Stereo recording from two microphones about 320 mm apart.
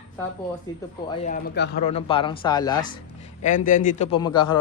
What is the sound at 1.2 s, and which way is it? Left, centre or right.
Speech, left.